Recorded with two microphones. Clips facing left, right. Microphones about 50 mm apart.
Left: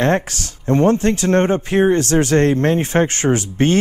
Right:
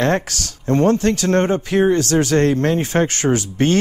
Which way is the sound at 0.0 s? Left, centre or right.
Left.